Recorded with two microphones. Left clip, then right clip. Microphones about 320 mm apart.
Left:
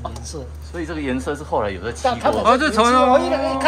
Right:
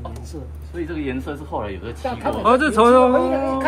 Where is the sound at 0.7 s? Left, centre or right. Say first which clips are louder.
Left 1 dB; left.